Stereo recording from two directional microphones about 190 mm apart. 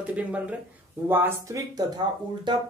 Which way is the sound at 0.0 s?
5° right (ahead or behind).